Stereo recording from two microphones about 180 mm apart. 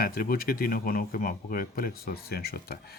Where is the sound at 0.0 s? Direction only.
55° left (ahead or behind).